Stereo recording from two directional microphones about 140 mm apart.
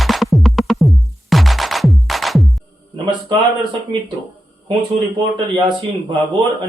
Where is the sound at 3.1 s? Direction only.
35° right (ahead or behind).